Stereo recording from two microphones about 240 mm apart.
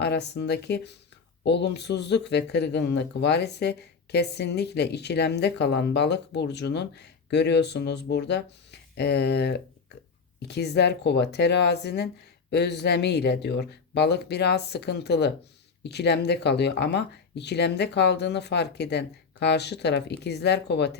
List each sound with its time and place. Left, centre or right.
0.0 s speech: left